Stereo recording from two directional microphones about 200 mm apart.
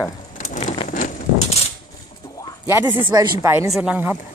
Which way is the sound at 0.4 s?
40° left (ahead or behind).